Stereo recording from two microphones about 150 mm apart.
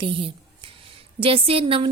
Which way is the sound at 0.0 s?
35° right (ahead or behind).